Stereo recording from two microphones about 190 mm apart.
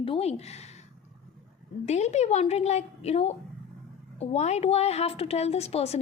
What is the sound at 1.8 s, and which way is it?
A woman's voice, 35° left (ahead or behind).